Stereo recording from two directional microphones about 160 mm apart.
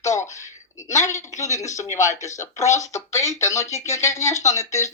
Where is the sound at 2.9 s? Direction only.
20° left (ahead or behind).